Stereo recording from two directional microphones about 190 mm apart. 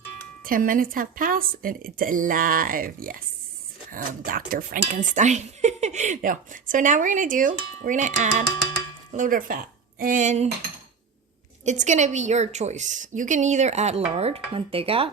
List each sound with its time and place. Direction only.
0.4 s speech: 45° right (ahead or behind)
11.6 s speech: 40° right (ahead or behind)